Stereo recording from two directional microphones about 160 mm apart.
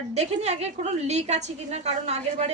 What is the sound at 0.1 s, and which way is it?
A woman's voice, 45° right (ahead or behind).